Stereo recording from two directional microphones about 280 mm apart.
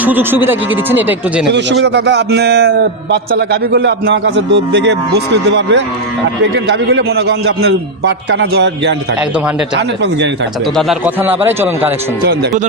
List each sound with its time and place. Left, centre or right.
0.0 s a man's voice: centre
1.5 s a man's voice: right
10.8 s a man's voice: centre
12.2 s a man's voice: right